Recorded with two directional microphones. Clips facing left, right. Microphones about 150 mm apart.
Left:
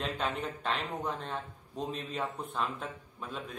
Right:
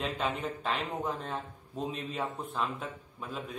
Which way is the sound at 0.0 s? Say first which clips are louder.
Right 1 dB; centre (ahead or behind).